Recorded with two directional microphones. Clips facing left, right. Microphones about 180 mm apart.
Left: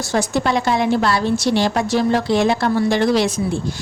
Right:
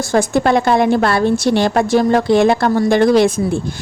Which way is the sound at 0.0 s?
50° right (ahead or behind).